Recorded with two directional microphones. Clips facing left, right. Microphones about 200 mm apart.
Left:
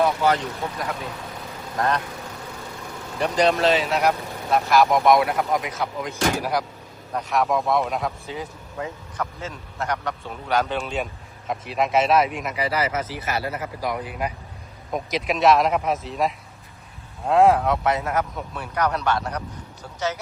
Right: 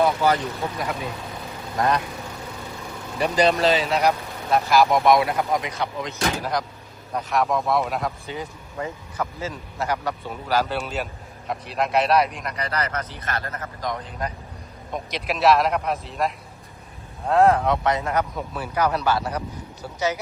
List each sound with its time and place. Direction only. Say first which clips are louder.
0.2 s a man's voice: even; centre (ahead or behind)
3.2 s a man's voice: even; centre (ahead or behind)